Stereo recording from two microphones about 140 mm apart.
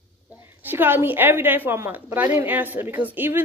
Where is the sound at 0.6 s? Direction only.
15° right (ahead or behind).